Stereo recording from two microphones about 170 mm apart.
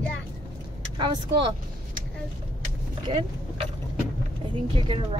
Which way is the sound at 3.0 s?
35° right (ahead or behind).